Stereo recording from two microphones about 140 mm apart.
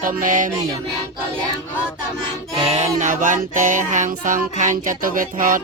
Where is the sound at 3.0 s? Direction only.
65° right (ahead or behind).